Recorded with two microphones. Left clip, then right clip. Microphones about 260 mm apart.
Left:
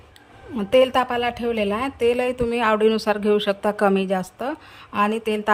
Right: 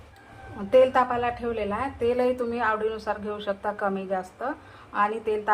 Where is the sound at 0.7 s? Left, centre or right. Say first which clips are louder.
Left 2 dB; left.